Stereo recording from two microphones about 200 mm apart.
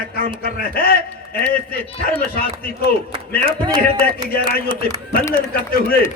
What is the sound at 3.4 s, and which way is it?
Speech, 25° right (ahead or behind).